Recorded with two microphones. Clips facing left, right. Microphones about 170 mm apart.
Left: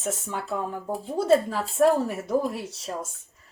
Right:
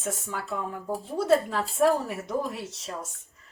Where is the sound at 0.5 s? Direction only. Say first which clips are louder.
Left 1 dB; 25° left (ahead or behind).